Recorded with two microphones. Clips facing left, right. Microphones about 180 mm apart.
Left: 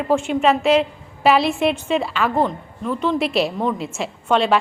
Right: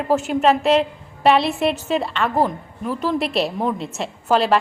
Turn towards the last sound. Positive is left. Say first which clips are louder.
# even
turn(degrees=0)  # may be behind; listen again after turning